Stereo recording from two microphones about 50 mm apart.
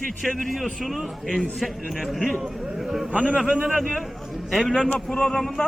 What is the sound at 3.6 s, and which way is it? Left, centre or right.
Speech, right.